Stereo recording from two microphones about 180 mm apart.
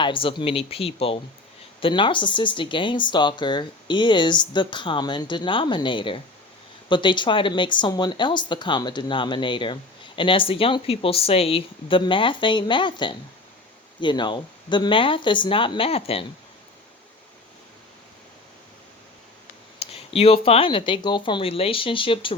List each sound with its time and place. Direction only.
0.0 s speech: 30° left (ahead or behind)
19.8 s speech: 35° left (ahead or behind)